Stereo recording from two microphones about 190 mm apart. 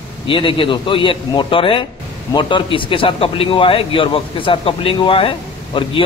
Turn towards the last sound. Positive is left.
turn(degrees=25)  # may be behind; listen again after turning